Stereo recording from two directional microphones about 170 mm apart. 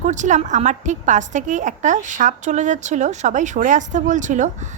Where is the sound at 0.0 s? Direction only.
45° right (ahead or behind).